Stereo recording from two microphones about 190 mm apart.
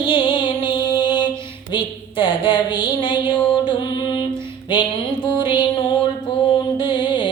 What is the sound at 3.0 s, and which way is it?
Music, 25° left (ahead or behind).